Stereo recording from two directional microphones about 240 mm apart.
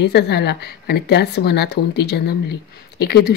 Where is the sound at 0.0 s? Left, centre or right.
Left.